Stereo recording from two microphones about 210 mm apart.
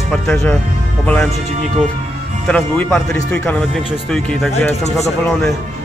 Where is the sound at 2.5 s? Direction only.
5° left (ahead or behind).